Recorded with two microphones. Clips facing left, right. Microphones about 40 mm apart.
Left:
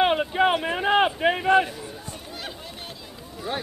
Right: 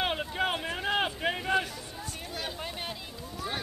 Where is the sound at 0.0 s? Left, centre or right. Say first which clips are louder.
Left 9 dB; left.